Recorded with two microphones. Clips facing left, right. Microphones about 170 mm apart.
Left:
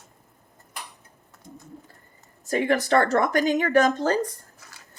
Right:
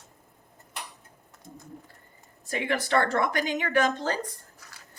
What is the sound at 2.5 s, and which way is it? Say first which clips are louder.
A woman's voice: left 6 dB; 45° left (ahead or behind).